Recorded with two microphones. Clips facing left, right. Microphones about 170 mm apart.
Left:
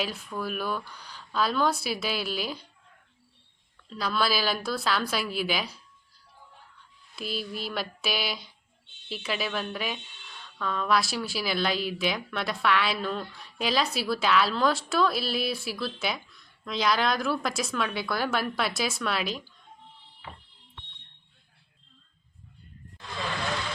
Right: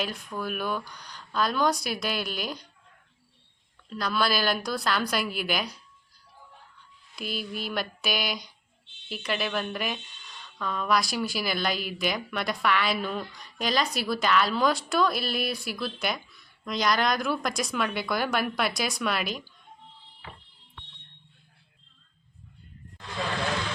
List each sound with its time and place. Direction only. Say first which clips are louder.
0.0 s a woman's voice: even; 5° left (ahead or behind)
3.9 s a woman's voice: right 1 dB; 5° left (ahead or behind)
7.2 s a woman's voice: even; centre (ahead or behind)